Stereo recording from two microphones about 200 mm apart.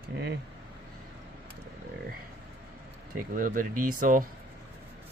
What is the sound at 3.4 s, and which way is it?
Speech, 45° right (ahead or behind).